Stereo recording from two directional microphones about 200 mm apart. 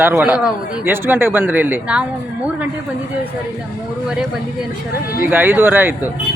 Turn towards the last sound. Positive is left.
turn(degrees=-10)  # may be behind; listen again after turning